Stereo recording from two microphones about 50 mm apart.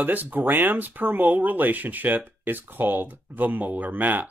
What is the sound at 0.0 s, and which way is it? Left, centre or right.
Speech, right.